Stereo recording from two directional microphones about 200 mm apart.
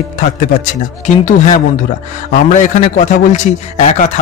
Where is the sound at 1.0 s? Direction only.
40° left (ahead or behind).